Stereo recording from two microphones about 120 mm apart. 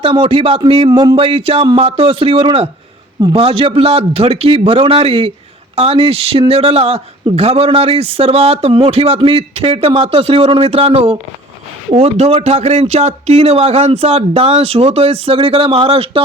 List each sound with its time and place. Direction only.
0.0 s a man's voice: 50° right (ahead or behind)
0.9 s speech: 30° right (ahead or behind)
1.1 s a man's voice: 50° right (ahead or behind)